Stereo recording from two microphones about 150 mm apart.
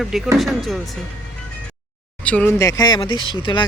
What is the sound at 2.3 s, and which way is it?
Speech, 10° left (ahead or behind).